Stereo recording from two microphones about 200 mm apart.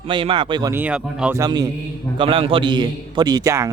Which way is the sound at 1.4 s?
20° right (ahead or behind).